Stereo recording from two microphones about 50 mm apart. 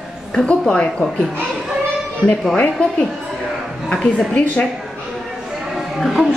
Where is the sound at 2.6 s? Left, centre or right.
Centre.